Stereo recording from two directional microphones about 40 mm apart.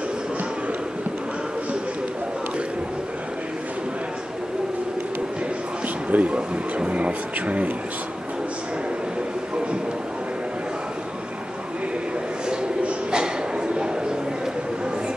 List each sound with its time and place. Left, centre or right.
6.0 s speech: right